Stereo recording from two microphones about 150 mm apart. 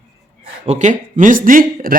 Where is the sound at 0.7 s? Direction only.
50° right (ahead or behind).